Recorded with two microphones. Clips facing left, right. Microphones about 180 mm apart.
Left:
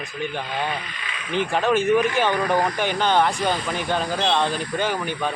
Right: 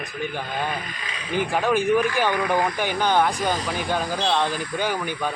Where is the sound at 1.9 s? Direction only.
20° left (ahead or behind).